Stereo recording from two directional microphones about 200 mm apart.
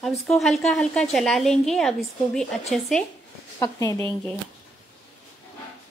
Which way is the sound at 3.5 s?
15° left (ahead or behind).